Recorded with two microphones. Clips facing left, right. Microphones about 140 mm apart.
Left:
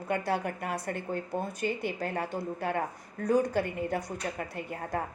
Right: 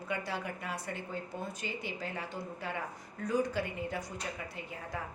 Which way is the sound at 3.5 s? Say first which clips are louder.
Left 6 dB; 55° left (ahead or behind).